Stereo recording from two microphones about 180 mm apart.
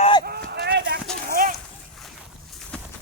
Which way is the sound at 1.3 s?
50° right (ahead or behind).